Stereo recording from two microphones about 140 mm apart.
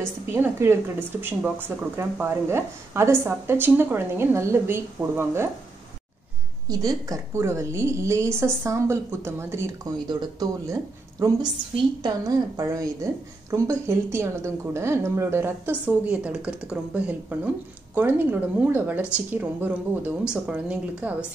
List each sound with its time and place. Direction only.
0.3 s a woman's voice: 20° right (ahead or behind)
6.7 s a woman's voice: 25° right (ahead or behind); by 21.3 s 10° right (ahead or behind)